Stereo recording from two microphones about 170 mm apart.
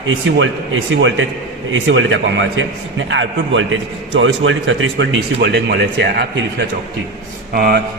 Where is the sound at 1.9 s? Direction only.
90° right.